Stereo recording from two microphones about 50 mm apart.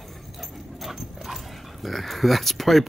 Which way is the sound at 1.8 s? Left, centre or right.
Centre.